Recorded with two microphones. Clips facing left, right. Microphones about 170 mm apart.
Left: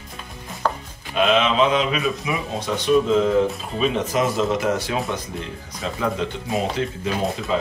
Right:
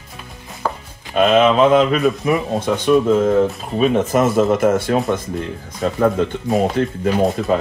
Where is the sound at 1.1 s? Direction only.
45° right (ahead or behind).